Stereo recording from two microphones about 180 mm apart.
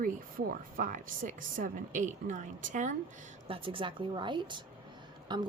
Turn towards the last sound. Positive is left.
turn(degrees=-25)  # may be behind; listen again after turning